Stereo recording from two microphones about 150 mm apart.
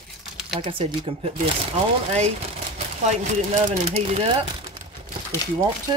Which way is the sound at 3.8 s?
40° right (ahead or behind).